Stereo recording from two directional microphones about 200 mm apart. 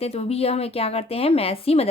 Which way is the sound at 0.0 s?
30° left (ahead or behind).